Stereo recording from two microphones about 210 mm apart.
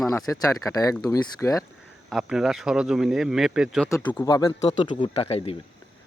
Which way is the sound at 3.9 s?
10° left (ahead or behind).